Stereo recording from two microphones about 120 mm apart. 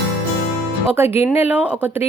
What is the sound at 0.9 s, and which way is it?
Speech, 20° right (ahead or behind).